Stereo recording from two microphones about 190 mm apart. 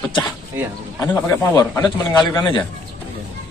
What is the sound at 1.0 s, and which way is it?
A man's voice, 15° left (ahead or behind).